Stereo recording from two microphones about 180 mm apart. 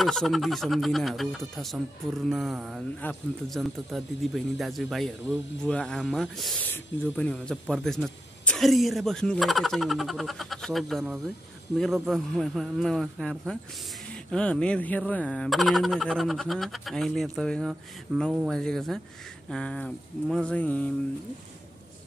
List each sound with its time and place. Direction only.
0.0 s speech: centre (ahead or behind)